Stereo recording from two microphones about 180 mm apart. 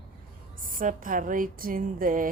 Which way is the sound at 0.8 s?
50° right (ahead or behind).